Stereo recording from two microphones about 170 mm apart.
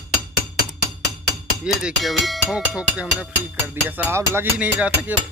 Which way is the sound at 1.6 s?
Centre (ahead or behind).